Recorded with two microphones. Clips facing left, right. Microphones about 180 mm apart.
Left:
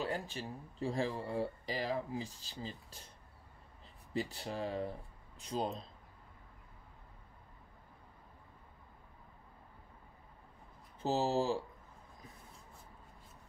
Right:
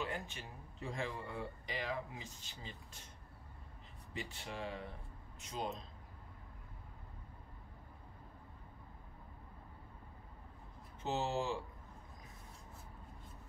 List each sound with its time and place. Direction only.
0.0 s speech: 35° left (ahead or behind)
4.1 s speech: 35° left (ahead or behind)
11.0 s speech: 35° left (ahead or behind)